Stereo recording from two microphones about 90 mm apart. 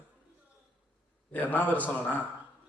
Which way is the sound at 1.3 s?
20° left (ahead or behind).